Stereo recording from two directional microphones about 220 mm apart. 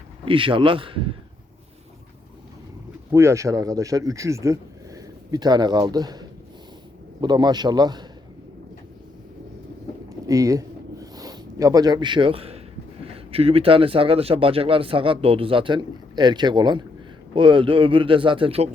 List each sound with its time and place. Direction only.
0.3 s speech: 25° right (ahead or behind)
3.1 s speech: 15° right (ahead or behind)
10.2 s a sound: 15° right (ahead or behind)
13.1 s speech: 25° right (ahead or behind)